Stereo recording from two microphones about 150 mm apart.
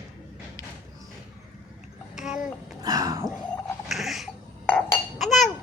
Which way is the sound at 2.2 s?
5° right (ahead or behind).